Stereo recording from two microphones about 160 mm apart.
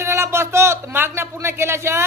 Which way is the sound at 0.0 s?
15° right (ahead or behind).